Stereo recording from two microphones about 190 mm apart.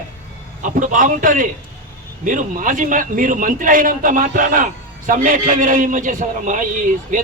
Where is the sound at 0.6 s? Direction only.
45° right (ahead or behind).